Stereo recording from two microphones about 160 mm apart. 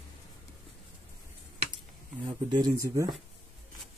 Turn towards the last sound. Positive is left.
turn(degrees=-25)  # may be behind; listen again after turning